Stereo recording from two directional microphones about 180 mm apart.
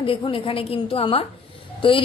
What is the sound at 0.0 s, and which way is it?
A woman's voice, 30° left (ahead or behind).